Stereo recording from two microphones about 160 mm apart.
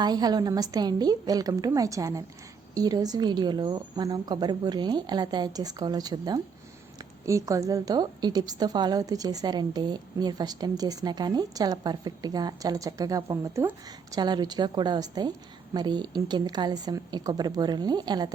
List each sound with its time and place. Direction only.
0.0 s a woman's voice: 25° right (ahead or behind)